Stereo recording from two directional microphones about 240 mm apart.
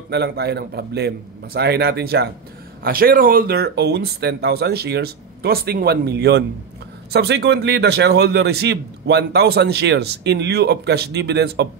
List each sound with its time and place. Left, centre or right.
0.1 s a man's voice: right